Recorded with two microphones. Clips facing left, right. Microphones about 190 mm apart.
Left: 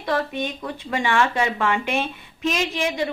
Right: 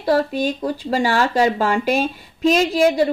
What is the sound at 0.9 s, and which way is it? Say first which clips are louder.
A woman's voice: right 3 dB; 35° right (ahead or behind).